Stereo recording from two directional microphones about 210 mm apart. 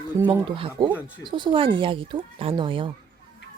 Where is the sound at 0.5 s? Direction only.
25° right (ahead or behind).